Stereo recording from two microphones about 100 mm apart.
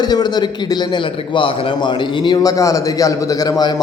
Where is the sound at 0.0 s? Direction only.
45° left (ahead or behind).